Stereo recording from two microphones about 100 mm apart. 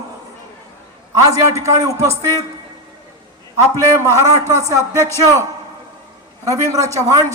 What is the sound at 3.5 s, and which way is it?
Speech, 30° right (ahead or behind).